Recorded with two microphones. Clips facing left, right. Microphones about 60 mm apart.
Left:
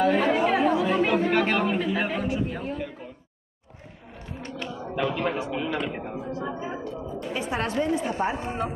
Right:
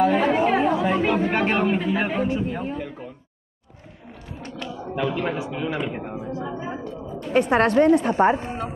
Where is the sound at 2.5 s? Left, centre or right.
Centre.